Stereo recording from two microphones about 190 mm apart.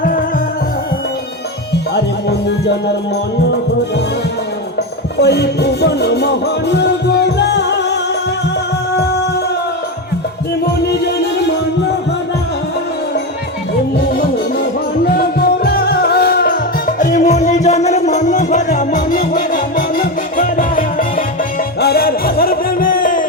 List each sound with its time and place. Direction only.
0.0 s music: 45° left (ahead or behind)
2.5 s music: 65° left (ahead or behind)
5.2 s music: 60° left (ahead or behind)
10.8 s music: 60° left (ahead or behind)
15.0 s music: 55° left (ahead or behind)